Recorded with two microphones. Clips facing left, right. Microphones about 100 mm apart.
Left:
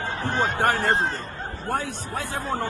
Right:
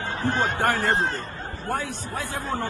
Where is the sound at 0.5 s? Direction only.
20° left (ahead or behind).